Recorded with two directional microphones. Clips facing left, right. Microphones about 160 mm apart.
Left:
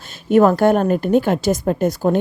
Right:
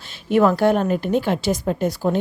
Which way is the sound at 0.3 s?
45° left (ahead or behind).